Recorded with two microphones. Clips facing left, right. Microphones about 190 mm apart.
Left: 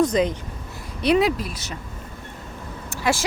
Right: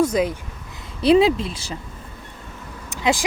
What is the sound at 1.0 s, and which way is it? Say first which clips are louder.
Speech: right 4 dB; 25° right (ahead or behind).